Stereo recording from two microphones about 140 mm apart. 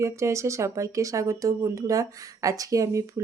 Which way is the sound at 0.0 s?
20° right (ahead or behind).